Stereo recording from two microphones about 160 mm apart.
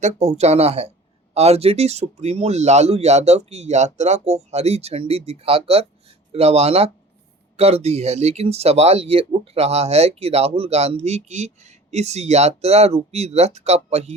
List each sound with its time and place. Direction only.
0.0 s speech: 45° right (ahead or behind)